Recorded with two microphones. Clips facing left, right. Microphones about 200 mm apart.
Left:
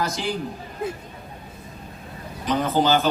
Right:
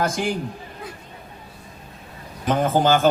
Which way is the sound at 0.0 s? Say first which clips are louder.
Right 3 dB; 50° right (ahead or behind).